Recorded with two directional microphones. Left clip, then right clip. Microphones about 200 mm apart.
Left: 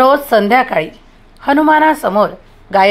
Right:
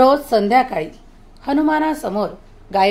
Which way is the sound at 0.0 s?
15° left (ahead or behind).